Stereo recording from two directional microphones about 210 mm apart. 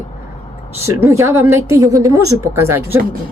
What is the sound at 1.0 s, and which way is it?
A woman's voice, 15° right (ahead or behind).